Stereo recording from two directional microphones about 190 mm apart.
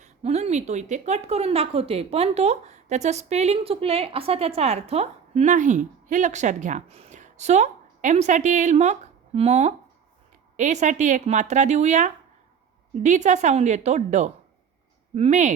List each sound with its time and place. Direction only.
0.0 s speech: 35° right (ahead or behind)